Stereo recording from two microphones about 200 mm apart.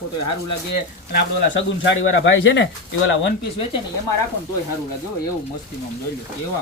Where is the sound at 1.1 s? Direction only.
65° left (ahead or behind).